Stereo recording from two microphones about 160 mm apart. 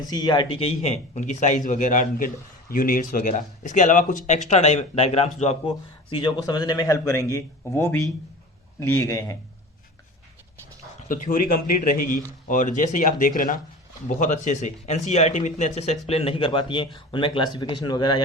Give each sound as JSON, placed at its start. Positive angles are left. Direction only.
{"t": 0.0, "sound": "a man's voice", "side_deg": 25}
{"t": 4.4, "sound": "speech", "side_deg": 45}
{"t": 11.1, "sound": "a man's voice", "side_deg": 55}